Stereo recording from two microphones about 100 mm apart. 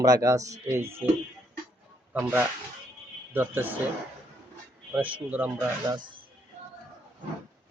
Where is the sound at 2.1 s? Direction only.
15° right (ahead or behind).